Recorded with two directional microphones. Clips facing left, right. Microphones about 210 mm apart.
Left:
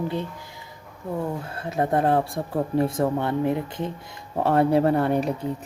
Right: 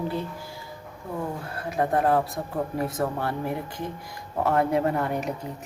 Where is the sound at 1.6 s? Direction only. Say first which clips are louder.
Left 1 dB; 25° left (ahead or behind).